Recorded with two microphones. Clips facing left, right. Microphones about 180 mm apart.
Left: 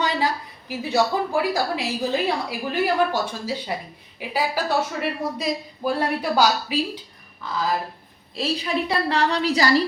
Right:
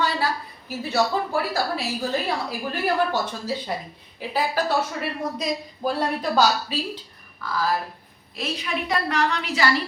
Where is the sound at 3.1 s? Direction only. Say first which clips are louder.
Even; 10° left (ahead or behind).